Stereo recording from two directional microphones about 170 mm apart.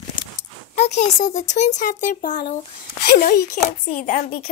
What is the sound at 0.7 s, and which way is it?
Speech, 40° left (ahead or behind).